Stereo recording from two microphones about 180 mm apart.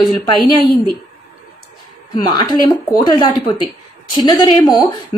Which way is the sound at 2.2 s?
25° left (ahead or behind).